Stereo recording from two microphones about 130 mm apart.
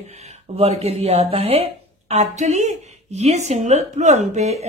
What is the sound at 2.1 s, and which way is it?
Speech, 60° right (ahead or behind).